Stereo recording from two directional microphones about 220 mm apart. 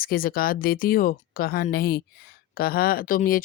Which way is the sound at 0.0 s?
40° left (ahead or behind).